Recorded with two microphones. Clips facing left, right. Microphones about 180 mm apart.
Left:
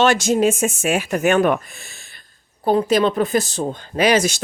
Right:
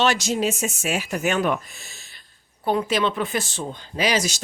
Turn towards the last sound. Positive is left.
turn(degrees=55)  # may be behind; listen again after turning